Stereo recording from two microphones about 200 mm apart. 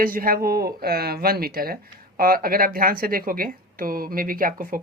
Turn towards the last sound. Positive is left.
turn(degrees=-45)  # may be behind; listen again after turning